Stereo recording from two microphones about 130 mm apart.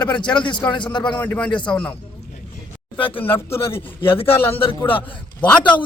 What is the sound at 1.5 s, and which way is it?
Speech, 35° left (ahead or behind).